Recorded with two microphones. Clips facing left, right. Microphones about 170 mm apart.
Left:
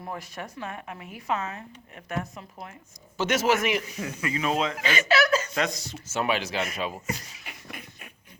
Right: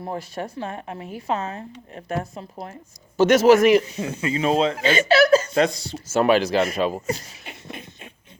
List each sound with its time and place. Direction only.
0.0 s a man's voice: 30° right (ahead or behind)